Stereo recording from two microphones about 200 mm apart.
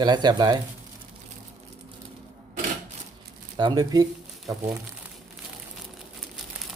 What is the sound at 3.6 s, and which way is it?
Speech, 20° right (ahead or behind).